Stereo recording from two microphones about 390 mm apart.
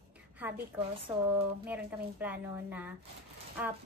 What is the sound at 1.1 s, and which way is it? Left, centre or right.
A woman's voice, centre.